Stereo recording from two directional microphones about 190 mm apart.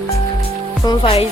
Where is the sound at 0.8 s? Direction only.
25° left (ahead or behind).